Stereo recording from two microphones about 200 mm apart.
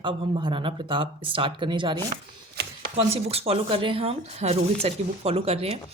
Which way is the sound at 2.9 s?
30° right (ahead or behind).